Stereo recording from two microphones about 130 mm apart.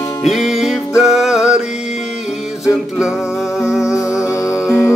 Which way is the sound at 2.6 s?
5° right (ahead or behind).